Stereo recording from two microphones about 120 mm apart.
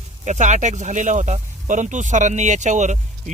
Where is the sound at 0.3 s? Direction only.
80° right.